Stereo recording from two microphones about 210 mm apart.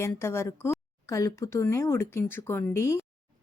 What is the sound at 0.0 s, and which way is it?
A woman's voice, 10° left (ahead or behind).